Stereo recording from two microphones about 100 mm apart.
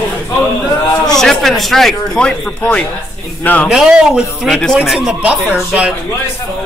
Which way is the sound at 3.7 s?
5° right (ahead or behind).